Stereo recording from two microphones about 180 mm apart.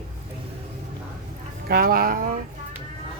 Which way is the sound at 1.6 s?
55° right (ahead or behind).